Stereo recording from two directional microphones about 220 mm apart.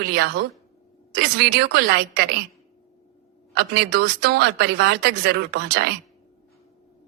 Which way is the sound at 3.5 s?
50° right (ahead or behind).